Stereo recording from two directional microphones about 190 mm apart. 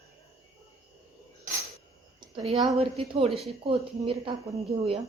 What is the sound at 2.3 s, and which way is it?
A woman's voice, 30° right (ahead or behind).